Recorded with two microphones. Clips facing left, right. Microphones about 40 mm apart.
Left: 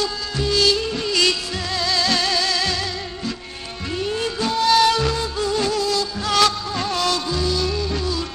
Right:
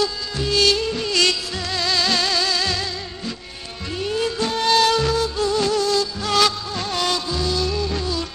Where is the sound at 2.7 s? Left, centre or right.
Centre.